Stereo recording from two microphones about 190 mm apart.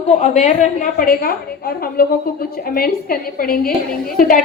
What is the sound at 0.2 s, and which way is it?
A woman's voice, 40° left (ahead or behind).